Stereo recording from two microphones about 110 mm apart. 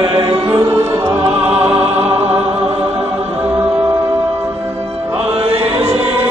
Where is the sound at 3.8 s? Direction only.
40° right (ahead or behind).